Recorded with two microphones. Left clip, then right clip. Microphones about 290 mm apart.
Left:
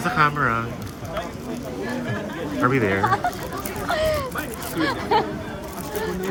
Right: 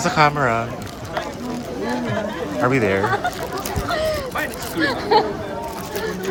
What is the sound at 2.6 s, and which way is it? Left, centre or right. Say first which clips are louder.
Speech: right 2 dB; centre.